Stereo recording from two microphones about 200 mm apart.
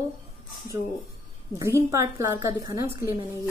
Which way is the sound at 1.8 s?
15° right (ahead or behind).